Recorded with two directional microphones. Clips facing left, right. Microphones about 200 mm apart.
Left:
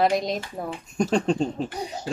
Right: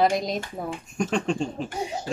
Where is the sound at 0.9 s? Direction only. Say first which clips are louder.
Left 3 dB; 35° left (ahead or behind).